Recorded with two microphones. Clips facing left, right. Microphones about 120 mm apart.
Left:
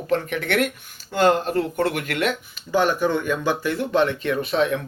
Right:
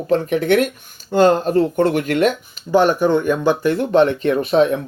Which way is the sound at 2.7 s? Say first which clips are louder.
Right 6 dB; 15° right (ahead or behind).